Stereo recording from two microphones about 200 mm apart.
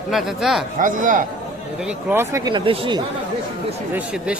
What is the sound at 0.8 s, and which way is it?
Speech, 40° right (ahead or behind).